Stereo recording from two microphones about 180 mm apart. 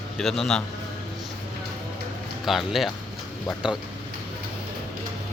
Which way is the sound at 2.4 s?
Centre (ahead or behind).